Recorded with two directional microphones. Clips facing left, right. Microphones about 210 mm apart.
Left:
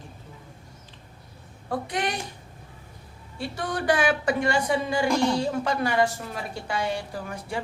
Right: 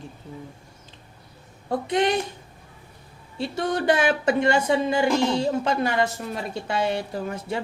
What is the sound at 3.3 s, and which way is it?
A woman's voice, 25° right (ahead or behind).